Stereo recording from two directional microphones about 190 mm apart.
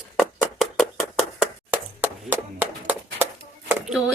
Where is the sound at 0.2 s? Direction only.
Centre (ahead or behind).